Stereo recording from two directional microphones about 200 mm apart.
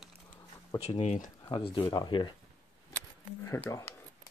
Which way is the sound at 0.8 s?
35° left (ahead or behind).